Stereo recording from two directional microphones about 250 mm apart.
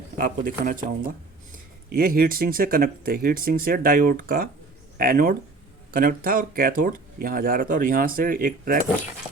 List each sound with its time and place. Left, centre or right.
0.2 s speech: right